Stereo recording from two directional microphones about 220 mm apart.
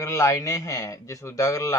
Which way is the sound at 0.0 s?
10° left (ahead or behind).